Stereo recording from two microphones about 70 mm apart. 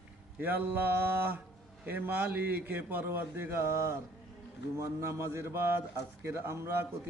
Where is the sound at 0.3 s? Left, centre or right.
Right.